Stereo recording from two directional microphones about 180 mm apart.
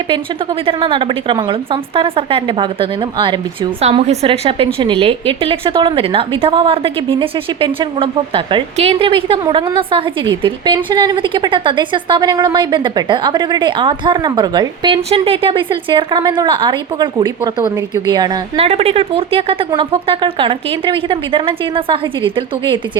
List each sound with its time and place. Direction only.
0.6 s a woman's voice: 30° right (ahead or behind)